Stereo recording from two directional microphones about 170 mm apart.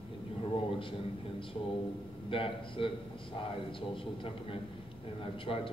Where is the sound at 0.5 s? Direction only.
30° left (ahead or behind).